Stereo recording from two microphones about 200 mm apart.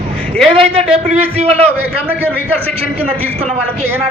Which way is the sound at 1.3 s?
30° right (ahead or behind).